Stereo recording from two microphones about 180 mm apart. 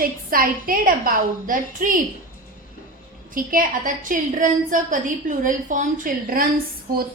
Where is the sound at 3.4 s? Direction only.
50° right (ahead or behind).